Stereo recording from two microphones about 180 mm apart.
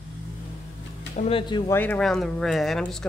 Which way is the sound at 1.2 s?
30° left (ahead or behind).